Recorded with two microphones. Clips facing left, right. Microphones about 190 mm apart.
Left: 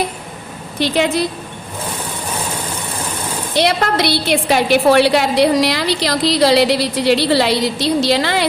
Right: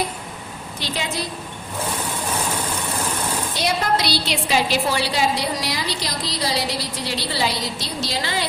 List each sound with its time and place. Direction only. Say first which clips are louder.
0.8 s a woman's voice: left 12 dB; 65° left (ahead or behind)
3.5 s a woman's voice: left 7 dB; 75° left (ahead or behind)